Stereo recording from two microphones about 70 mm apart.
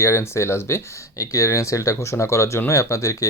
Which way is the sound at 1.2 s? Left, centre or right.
Left.